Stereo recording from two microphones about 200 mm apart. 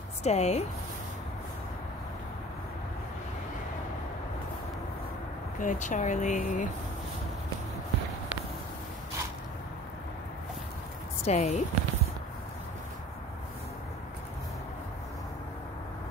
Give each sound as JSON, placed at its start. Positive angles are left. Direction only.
{"t": 0.2, "sound": "speech", "side_deg": 35}
{"t": 5.6, "sound": "speech", "side_deg": 40}
{"t": 11.2, "sound": "speech", "side_deg": 35}